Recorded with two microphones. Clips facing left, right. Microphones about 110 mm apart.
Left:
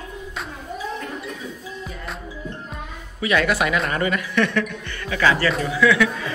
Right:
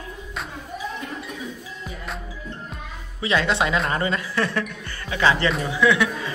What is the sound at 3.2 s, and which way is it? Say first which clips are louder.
A man's voice: left 2 dB; 25° right (ahead or behind).